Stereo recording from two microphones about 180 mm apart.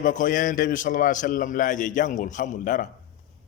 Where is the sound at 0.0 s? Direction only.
45° left (ahead or behind).